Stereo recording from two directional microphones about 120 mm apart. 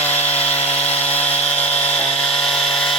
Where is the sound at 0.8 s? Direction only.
60° left (ahead or behind).